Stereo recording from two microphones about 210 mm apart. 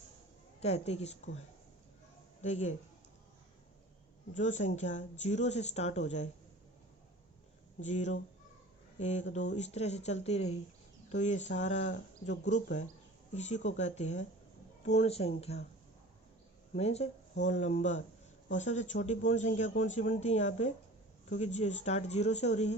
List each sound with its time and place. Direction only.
0.6 s speech: 30° left (ahead or behind)
2.4 s speech: 35° left (ahead or behind)
4.4 s speech: 35° left (ahead or behind)
7.8 s speech: 35° left (ahead or behind)
13.3 s speech: 35° left (ahead or behind)
16.7 s speech: 30° left (ahead or behind)